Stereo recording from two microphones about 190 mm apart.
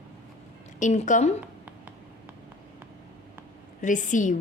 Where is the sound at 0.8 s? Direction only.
40° left (ahead or behind).